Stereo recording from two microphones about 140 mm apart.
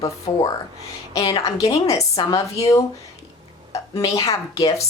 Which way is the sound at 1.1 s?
25° left (ahead or behind).